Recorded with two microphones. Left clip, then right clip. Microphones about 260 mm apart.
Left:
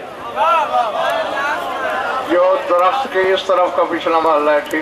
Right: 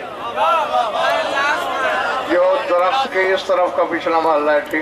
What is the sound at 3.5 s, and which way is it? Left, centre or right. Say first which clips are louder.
Speech: left 2 dB; centre.